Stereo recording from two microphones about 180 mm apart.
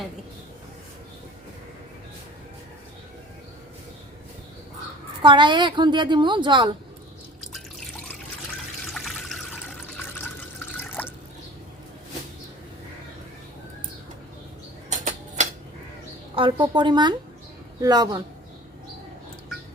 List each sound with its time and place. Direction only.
5.2 s a woman's voice: 25° right (ahead or behind)
8.9 s water: centre (ahead or behind)
10.8 s drip: 10° left (ahead or behind)
14.8 s a sound: 40° right (ahead or behind)
16.3 s a woman's voice: 30° right (ahead or behind)